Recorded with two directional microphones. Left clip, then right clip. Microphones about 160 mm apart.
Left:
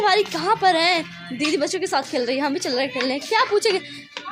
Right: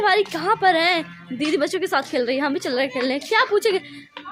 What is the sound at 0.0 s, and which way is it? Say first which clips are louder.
A woman's voice: even; 15° right (ahead or behind).